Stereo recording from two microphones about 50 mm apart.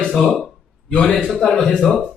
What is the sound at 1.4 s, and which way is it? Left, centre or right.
Speech, centre.